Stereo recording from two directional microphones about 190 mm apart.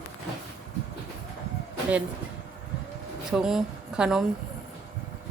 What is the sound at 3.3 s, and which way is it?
Speech, 5° right (ahead or behind).